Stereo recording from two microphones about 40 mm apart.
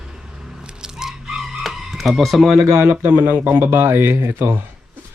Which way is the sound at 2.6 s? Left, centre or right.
Right.